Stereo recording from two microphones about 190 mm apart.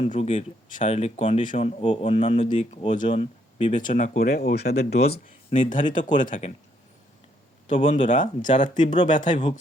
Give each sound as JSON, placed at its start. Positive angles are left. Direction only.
{"t": 0.0, "sound": "speech", "side_deg": 35}
{"t": 5.5, "sound": "speech", "side_deg": 45}
{"t": 7.7, "sound": "speech", "side_deg": 40}
{"t": 9.2, "sound": "speech", "side_deg": 25}